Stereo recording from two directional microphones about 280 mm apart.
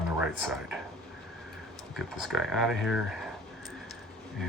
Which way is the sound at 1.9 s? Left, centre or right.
Centre.